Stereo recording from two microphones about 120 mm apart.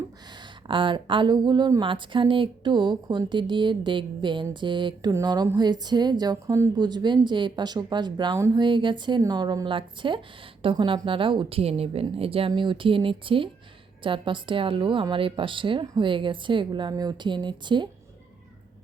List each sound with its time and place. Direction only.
0.7 s a woman's voice: 45° right (ahead or behind)